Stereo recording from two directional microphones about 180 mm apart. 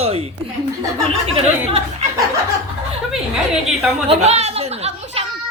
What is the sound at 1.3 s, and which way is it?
Speech, 35° right (ahead or behind).